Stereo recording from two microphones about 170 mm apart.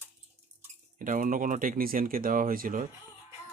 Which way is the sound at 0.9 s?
50° right (ahead or behind).